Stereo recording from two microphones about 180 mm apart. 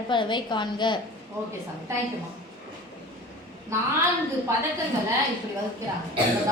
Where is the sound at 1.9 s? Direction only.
15° right (ahead or behind).